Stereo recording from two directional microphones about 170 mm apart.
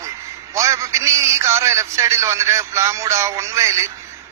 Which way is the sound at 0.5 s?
20° right (ahead or behind).